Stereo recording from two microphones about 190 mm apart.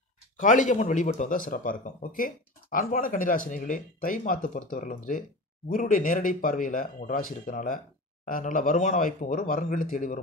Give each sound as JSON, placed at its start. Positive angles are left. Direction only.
{"t": 0.4, "sound": "speech", "side_deg": 40}